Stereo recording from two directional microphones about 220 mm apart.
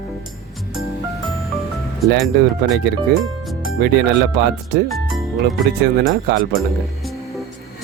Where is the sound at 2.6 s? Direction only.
50° right (ahead or behind).